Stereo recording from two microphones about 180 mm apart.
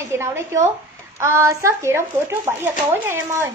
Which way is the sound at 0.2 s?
15° right (ahead or behind).